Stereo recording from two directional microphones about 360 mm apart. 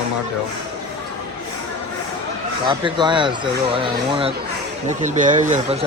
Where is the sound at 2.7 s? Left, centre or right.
Centre.